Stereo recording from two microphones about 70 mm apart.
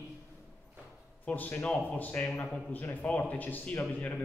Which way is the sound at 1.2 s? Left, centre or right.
Left.